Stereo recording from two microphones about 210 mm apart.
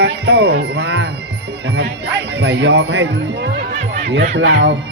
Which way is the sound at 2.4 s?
60° right (ahead or behind).